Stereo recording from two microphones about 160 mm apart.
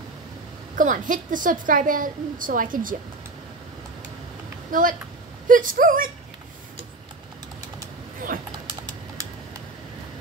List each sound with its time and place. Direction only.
0.7 s a woman's voice: 55° right (ahead or behind)
4.6 s a woman's voice: 55° right (ahead or behind)